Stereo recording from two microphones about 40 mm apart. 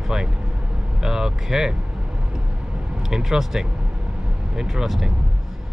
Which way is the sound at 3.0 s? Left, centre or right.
Centre.